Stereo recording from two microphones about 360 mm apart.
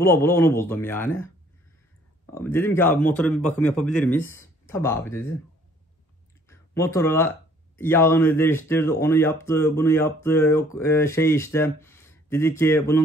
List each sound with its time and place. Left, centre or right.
0.0 s speech: centre
2.3 s a man's voice: centre
6.5 s speech: centre